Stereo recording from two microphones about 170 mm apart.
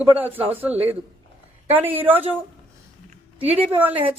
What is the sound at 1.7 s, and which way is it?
Speech, 10° right (ahead or behind).